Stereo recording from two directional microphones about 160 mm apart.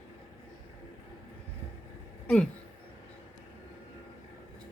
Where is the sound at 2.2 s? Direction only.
5° left (ahead or behind).